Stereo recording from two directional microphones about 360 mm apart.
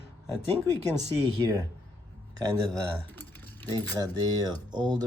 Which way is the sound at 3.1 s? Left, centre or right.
Centre.